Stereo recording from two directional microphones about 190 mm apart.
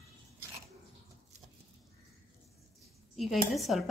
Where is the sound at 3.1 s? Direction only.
Centre (ahead or behind).